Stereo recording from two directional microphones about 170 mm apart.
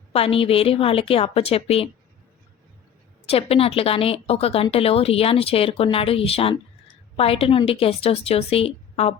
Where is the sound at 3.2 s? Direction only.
35° left (ahead or behind).